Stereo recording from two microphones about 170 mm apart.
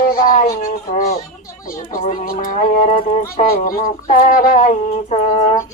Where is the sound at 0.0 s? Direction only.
55° left (ahead or behind); by 5.6 s 40° left (ahead or behind).